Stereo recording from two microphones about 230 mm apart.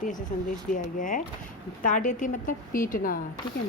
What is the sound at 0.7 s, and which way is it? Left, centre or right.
A woman's voice, left.